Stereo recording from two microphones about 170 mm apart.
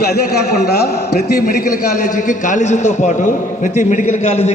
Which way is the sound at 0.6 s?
70° left (ahead or behind).